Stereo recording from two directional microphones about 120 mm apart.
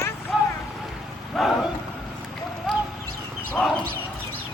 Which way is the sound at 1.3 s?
Centre (ahead or behind).